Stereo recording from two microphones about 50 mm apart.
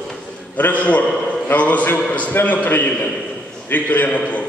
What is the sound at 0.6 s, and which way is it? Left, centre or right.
A man's voice, left.